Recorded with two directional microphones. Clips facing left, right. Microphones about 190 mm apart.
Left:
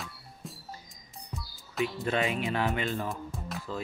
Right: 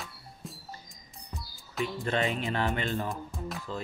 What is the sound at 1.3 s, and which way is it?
Speech, centre (ahead or behind).